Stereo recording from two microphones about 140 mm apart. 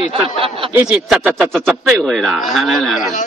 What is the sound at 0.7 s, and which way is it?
Speech, 5° right (ahead or behind).